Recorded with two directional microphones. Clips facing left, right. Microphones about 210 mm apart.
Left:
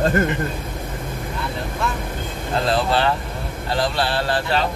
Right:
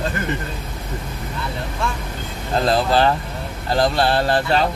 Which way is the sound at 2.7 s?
40° right (ahead or behind).